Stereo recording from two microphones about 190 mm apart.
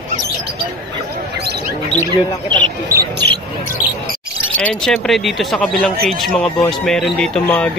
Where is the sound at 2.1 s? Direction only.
25° right (ahead or behind).